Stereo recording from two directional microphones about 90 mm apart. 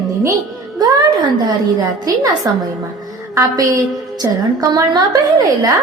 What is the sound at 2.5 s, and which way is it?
A woman's voice, 45° right (ahead or behind).